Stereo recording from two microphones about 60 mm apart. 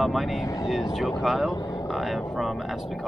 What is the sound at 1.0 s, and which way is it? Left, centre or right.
Speech, centre.